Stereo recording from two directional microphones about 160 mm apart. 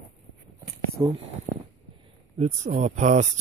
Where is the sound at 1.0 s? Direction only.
30° right (ahead or behind).